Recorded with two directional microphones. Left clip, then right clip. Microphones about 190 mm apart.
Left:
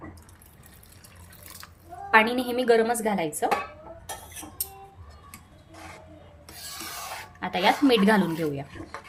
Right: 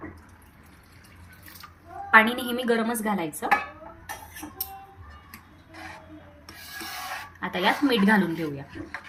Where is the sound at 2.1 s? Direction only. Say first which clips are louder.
Right 2 dB; 30° left (ahead or behind).